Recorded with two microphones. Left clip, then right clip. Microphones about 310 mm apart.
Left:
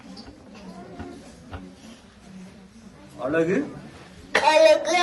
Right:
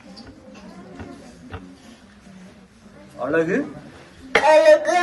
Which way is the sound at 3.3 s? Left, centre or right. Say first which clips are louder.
Right 2 dB; right.